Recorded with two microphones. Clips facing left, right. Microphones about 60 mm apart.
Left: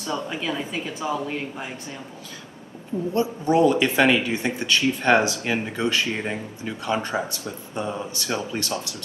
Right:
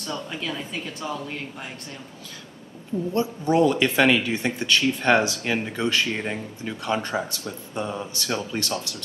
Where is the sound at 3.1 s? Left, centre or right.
Left.